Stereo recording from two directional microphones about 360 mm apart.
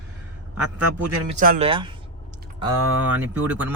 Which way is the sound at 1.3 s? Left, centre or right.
Right.